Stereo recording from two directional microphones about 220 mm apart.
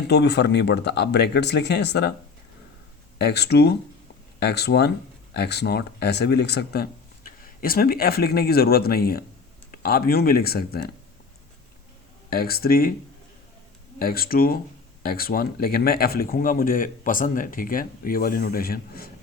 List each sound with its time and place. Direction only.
0.1 s speech: 50° left (ahead or behind)
3.2 s speech: 50° left (ahead or behind)
12.3 s speech: 45° left (ahead or behind)
14.0 s speech: 40° left (ahead or behind)